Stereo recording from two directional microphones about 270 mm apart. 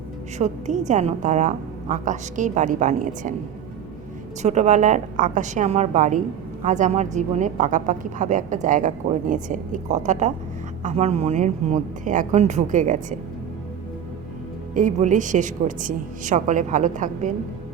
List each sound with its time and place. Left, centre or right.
0.3 s a woman's voice: right
4.4 s a woman's voice: right
14.7 s a woman's voice: right